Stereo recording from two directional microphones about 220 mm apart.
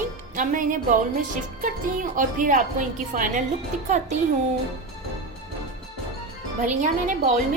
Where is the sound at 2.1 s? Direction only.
35° right (ahead or behind).